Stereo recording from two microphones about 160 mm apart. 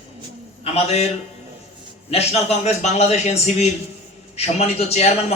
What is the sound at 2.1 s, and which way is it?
A man's voice, 40° left (ahead or behind).